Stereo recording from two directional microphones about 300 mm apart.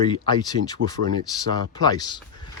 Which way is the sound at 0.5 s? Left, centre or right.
Right.